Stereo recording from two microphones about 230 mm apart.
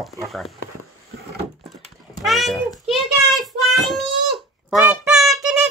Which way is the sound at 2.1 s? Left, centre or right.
Centre.